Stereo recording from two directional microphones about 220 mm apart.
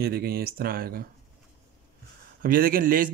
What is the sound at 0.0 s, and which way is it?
Speech, 45° right (ahead or behind).